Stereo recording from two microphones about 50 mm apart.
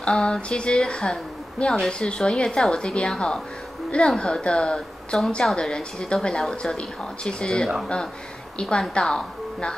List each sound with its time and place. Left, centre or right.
0.0 s a woman's voice: centre